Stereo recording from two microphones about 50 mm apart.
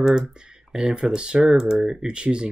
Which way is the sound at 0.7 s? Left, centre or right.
Centre.